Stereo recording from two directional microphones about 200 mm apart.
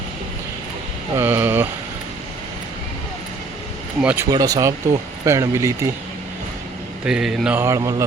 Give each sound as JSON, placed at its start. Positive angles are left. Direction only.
{"t": 1.1, "sound": "speech", "side_deg": -10}
{"t": 4.0, "sound": "mantra", "side_deg": -10}
{"t": 4.3, "sound": "mantra", "side_deg": -20}
{"t": 7.0, "sound": "mantra", "side_deg": -5}